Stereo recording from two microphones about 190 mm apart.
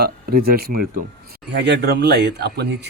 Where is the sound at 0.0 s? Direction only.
55° right (ahead or behind).